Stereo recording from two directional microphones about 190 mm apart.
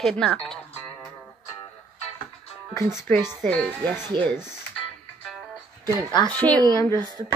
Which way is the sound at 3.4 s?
5° left (ahead or behind).